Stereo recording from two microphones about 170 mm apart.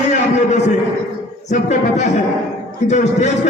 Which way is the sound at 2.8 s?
40° left (ahead or behind).